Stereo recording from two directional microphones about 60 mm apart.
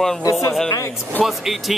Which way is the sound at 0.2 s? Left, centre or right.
Left.